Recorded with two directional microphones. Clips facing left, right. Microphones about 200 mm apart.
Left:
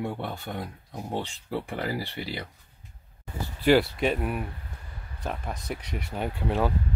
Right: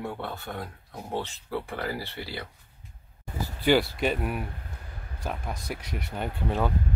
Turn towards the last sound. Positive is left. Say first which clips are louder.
# left 1 dB
turn(degrees=5)  # may be behind; listen again after turning